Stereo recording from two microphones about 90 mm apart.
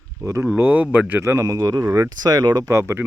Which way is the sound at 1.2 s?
35° right (ahead or behind).